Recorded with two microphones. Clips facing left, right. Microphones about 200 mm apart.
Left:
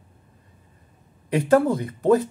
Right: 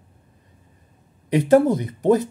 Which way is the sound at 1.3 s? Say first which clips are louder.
Right 3 dB; 15° right (ahead or behind).